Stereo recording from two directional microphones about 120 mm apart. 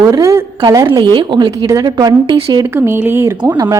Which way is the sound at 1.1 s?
40° right (ahead or behind).